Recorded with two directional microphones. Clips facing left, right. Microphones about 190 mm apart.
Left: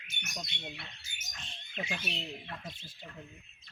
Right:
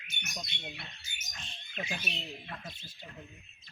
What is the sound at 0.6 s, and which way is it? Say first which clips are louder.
Speech: even; 15° right (ahead or behind).